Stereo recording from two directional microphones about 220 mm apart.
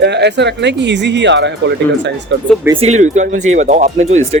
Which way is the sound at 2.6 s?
25° right (ahead or behind).